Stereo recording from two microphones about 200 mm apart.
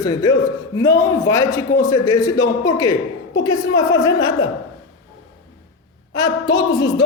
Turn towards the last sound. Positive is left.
turn(degrees=20)  # may be behind; listen again after turning